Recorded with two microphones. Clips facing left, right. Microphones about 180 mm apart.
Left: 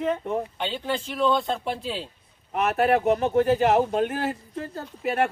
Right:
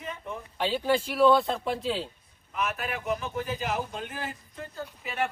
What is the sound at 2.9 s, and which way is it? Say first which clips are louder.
Speech: left 11 dB; 40° left (ahead or behind).